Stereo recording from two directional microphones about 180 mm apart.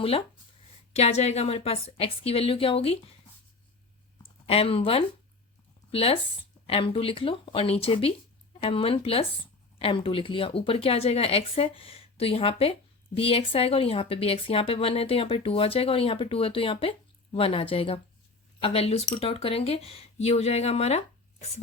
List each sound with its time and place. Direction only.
0.0 s speech: 30° left (ahead or behind)
4.4 s speech: 35° left (ahead or behind)